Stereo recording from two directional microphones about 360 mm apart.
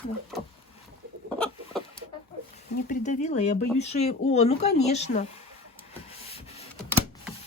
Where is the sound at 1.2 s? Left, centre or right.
Centre.